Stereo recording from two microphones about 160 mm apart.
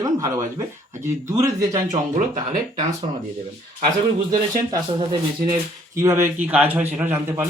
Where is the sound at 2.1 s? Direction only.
55° right (ahead or behind).